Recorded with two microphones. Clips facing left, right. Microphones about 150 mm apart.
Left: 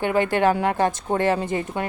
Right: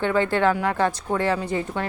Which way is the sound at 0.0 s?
15° left (ahead or behind).